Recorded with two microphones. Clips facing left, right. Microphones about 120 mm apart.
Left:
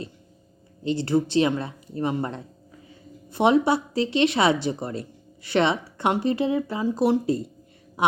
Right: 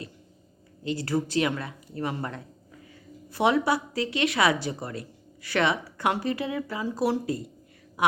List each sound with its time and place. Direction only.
0.9 s a woman's voice: 25° left (ahead or behind)